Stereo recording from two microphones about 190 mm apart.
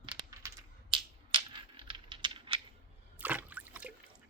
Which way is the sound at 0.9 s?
25° right (ahead or behind).